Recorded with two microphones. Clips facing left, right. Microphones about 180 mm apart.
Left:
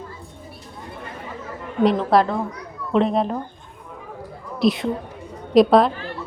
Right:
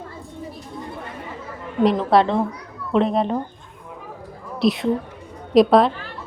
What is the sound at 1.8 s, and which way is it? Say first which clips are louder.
A woman's voice: right 1 dB; centre (ahead or behind).